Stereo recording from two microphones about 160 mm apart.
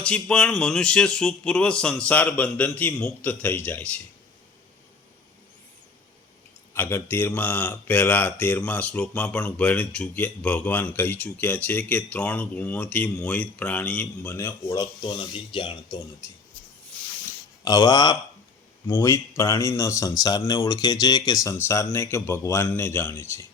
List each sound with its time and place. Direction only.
0.0 s speech: 5° left (ahead or behind)
6.7 s speech: 15° left (ahead or behind); by 16.0 s 30° left (ahead or behind)
17.7 s speech: 25° left (ahead or behind)